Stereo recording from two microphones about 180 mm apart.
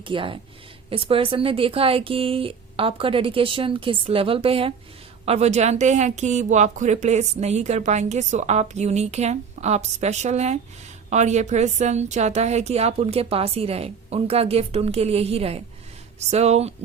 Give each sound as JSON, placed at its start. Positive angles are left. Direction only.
{"t": 0.0, "sound": "a woman's voice", "side_deg": -30}